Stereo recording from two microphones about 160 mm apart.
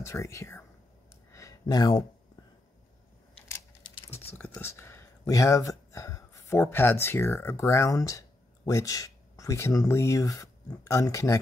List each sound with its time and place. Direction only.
0.0 s speech: 20° left (ahead or behind)
1.3 s a sound: 20° left (ahead or behind)
4.4 s speech: 15° left (ahead or behind)